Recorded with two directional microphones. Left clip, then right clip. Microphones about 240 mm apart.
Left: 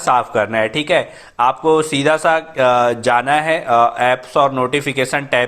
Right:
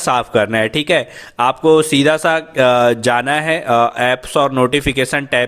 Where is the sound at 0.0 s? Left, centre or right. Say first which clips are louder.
Even; right.